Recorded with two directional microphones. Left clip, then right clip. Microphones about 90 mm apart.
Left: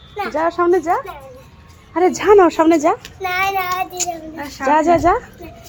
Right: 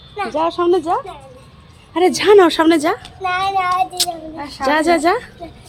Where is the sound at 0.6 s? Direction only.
Centre (ahead or behind).